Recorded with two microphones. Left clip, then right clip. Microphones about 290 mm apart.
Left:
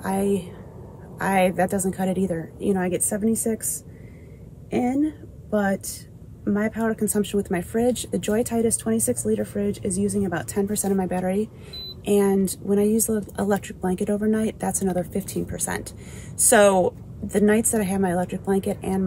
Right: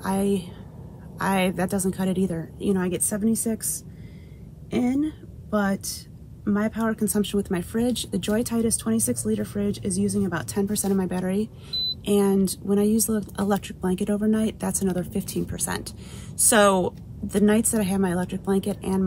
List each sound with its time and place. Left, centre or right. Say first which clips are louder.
0.0 s speech: left 1 dB; centre
4.6 s a woman's voice: left 2 dB; centre